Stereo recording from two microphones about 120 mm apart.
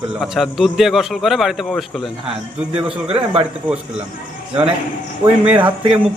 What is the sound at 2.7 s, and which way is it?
Speech, 55° right (ahead or behind).